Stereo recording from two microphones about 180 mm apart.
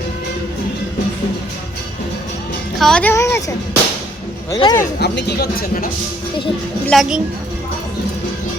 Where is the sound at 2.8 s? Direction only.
5° left (ahead or behind); by 4.8 s 20° left (ahead or behind).